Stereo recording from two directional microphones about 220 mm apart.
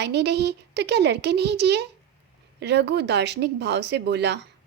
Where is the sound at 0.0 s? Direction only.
50° right (ahead or behind).